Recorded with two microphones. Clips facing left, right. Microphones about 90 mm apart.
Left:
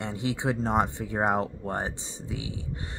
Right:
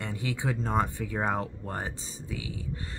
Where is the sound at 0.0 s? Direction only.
25° left (ahead or behind).